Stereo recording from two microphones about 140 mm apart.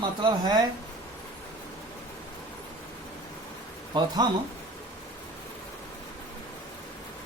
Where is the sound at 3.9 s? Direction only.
35° right (ahead or behind).